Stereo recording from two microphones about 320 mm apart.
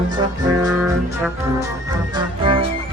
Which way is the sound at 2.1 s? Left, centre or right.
Centre.